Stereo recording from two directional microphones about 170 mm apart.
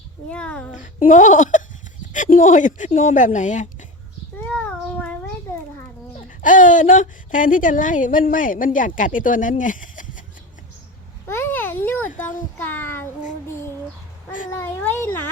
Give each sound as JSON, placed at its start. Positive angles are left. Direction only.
{"t": 0.3, "sound": "a child's voice", "side_deg": 5}
{"t": 0.7, "sound": "a woman's voice", "side_deg": 45}
{"t": 4.4, "sound": "child singing", "side_deg": 10}
{"t": 6.1, "sound": "a woman's voice", "side_deg": 50}
{"t": 11.3, "sound": "a sound", "side_deg": 15}
{"t": 12.5, "sound": "child singing", "side_deg": 10}
{"t": 14.5, "sound": "a sound", "side_deg": 10}